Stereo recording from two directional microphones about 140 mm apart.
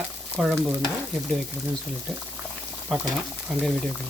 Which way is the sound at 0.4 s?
Centre (ahead or behind).